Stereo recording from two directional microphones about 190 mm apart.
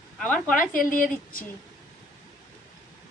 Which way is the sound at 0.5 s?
45° left (ahead or behind).